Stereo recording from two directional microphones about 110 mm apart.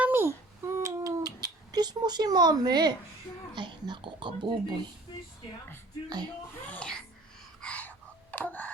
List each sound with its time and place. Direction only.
0.0 s babbling: 20° right (ahead or behind)
0.6 s a sound: 30° right (ahead or behind)
3.5 s speech: 45° right (ahead or behind)
6.7 s babbling: 10° left (ahead or behind)
7.6 s whispering: 10° left (ahead or behind)